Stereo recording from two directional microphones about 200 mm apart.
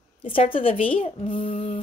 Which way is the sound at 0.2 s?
25° left (ahead or behind).